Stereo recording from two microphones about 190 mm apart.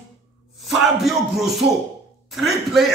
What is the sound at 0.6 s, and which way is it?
A man's voice, centre (ahead or behind).